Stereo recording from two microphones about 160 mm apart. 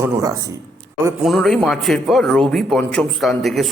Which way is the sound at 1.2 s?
Centre (ahead or behind).